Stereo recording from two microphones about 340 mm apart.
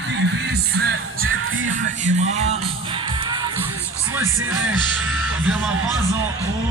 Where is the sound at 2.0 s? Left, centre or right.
Centre.